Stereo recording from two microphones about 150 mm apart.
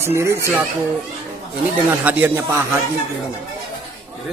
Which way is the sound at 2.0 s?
10° right (ahead or behind).